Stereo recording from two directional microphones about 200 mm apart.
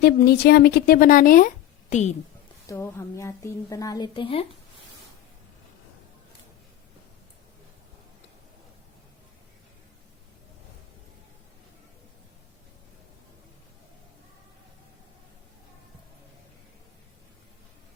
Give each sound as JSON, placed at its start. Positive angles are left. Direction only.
{"t": 0.0, "sound": "speech", "side_deg": 50}
{"t": 2.6, "sound": "a woman's voice", "side_deg": 15}